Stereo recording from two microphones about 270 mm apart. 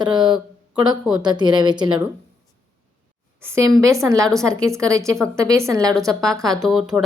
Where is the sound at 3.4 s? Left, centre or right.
Centre.